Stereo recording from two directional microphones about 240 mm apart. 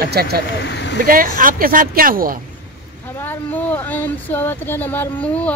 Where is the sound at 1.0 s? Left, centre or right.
Right.